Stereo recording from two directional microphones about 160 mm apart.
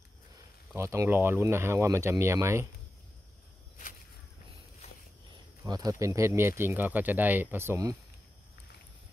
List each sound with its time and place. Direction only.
0.7 s speech: 15° right (ahead or behind)
5.6 s speech: 25° right (ahead or behind)